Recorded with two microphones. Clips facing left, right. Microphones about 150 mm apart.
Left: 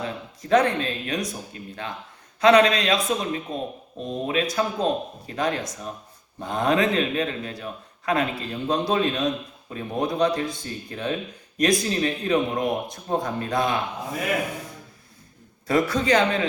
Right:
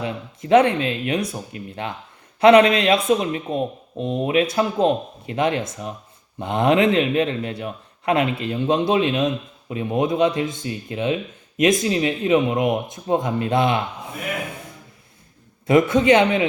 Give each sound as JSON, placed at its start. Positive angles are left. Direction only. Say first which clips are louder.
{"t": 0.0, "sound": "a man's voice", "louder": "right 3 dB", "side_deg": -25}
{"t": 15.6, "sound": "a man's voice", "louder": "right 6 dB", "side_deg": -20}